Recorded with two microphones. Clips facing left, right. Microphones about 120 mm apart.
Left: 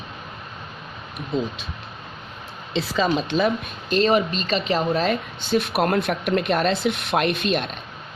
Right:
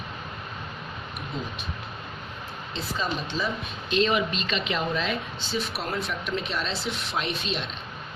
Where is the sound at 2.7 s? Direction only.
80° left.